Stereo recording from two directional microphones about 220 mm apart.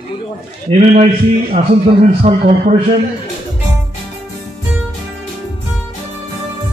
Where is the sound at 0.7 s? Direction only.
30° right (ahead or behind).